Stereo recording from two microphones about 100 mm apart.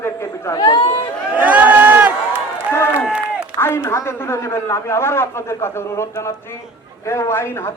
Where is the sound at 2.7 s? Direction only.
25° left (ahead or behind).